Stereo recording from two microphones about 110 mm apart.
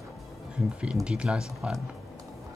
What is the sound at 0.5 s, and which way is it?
Speech, 10° right (ahead or behind).